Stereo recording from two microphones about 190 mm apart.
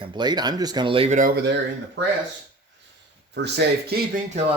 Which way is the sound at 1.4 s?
65° right (ahead or behind).